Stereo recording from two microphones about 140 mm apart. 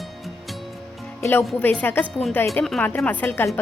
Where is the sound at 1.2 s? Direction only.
15° left (ahead or behind).